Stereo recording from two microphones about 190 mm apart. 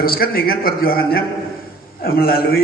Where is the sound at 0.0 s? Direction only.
50° left (ahead or behind).